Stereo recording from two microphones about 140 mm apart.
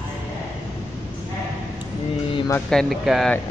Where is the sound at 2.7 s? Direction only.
Centre (ahead or behind).